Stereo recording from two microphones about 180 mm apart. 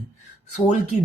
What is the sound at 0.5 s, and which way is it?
Speech, 40° left (ahead or behind).